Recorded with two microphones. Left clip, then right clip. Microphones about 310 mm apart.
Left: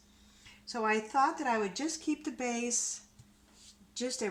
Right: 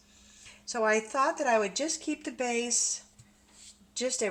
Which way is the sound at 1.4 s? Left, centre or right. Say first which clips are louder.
Right 5 dB; left.